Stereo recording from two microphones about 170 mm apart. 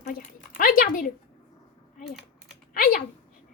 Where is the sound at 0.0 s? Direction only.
55° left (ahead or behind).